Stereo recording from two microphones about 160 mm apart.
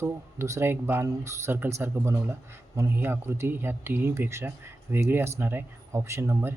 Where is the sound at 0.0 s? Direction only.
20° right (ahead or behind).